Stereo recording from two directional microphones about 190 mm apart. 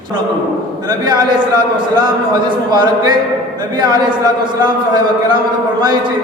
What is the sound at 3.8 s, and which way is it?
Speech, 20° right (ahead or behind).